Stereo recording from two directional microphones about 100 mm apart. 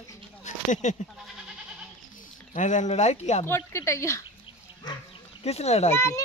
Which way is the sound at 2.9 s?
90° left.